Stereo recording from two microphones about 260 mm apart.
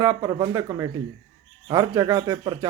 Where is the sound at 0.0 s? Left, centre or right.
Centre.